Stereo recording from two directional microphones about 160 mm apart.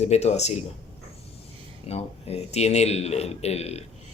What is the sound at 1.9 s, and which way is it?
Speech, 40° left (ahead or behind).